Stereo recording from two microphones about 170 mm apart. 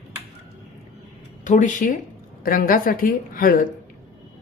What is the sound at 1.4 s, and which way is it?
Speech, 50° left (ahead or behind).